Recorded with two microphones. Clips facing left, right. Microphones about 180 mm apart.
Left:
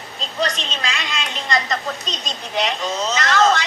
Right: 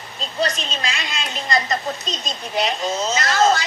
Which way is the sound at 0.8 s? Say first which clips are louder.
Left 1 dB; 35° right (ahead or behind).